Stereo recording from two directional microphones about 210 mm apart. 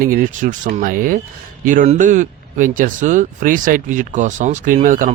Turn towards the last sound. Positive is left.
turn(degrees=-40)  # may be behind; listen again after turning